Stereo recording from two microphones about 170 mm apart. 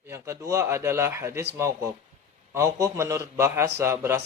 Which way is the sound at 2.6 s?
15° right (ahead or behind).